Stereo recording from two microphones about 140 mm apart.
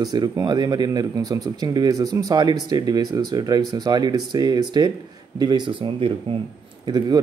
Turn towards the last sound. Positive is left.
turn(degrees=-30)  # may be behind; listen again after turning